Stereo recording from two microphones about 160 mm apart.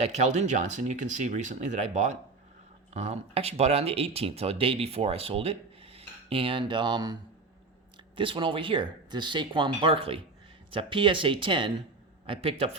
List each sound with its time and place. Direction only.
0.0 s speech: 45° right (ahead or behind)